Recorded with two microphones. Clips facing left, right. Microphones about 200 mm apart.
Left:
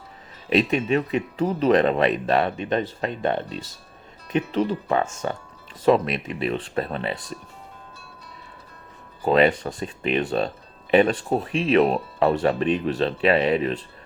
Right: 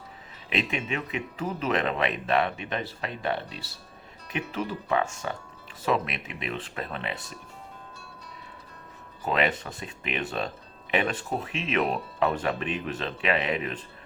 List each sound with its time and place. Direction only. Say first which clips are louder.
0.5 s speech: left 9 dB; 40° left (ahead or behind)
9.2 s speech: left 8 dB; 35° left (ahead or behind)